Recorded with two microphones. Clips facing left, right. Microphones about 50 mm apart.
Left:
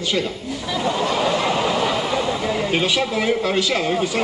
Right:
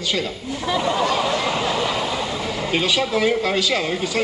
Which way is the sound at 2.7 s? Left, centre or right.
Left.